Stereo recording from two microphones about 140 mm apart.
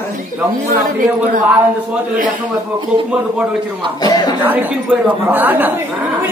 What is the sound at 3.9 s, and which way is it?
Speech, 30° left (ahead or behind).